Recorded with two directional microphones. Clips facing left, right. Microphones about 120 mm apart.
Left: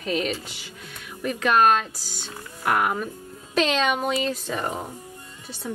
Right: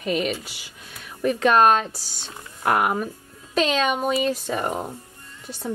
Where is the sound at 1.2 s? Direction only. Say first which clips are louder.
Right 3 dB; 35° right (ahead or behind).